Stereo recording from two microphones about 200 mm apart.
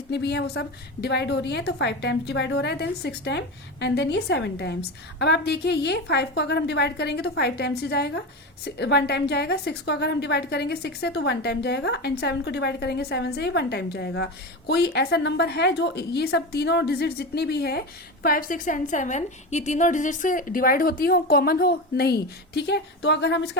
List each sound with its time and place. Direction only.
0.1 s a woman's voice: 55° left (ahead or behind)